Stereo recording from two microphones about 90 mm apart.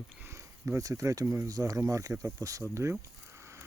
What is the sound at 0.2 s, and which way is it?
Speech, 30° right (ahead or behind).